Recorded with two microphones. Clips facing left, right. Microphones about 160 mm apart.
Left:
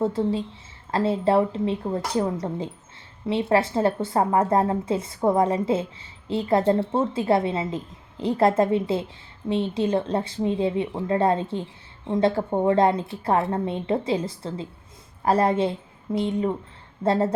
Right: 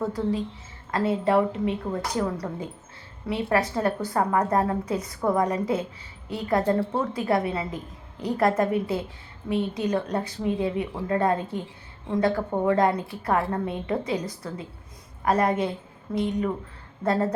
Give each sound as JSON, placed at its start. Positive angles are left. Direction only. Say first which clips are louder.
{"t": 0.0, "sound": "a woman's voice", "louder": "left 3 dB", "side_deg": 25}